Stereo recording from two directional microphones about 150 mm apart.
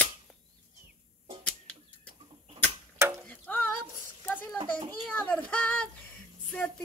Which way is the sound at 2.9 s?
20° right (ahead or behind).